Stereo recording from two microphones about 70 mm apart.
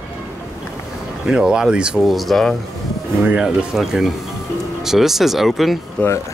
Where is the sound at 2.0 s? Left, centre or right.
Centre.